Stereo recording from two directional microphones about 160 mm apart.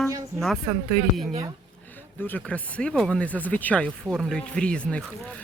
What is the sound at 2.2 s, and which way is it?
Speech, 10° left (ahead or behind).